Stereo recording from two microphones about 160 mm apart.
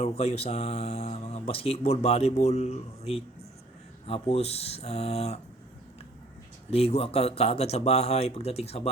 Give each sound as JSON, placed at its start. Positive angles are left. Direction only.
{"t": 0.0, "sound": "speech", "side_deg": 40}
{"t": 6.7, "sound": "speech", "side_deg": 40}